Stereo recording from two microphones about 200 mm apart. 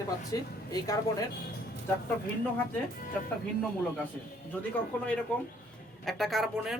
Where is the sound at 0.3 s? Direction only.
20° left (ahead or behind).